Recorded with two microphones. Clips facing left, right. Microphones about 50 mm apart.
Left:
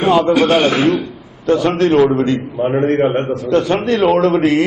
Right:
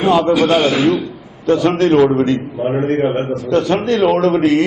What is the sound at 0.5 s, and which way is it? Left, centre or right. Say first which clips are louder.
Speech: even; left.